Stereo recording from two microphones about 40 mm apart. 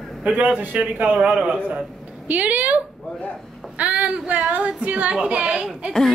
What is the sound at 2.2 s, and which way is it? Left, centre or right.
Speech, right.